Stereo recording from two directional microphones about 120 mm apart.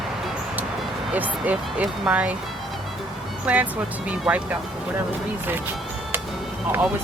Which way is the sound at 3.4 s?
10° right (ahead or behind).